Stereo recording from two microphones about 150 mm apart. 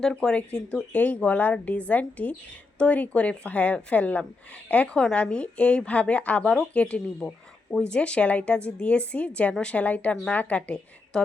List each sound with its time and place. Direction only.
0.0 s speech: 5° left (ahead or behind)